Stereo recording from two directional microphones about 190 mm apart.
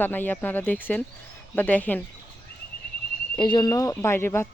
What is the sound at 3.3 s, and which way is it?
Speech, 25° left (ahead or behind).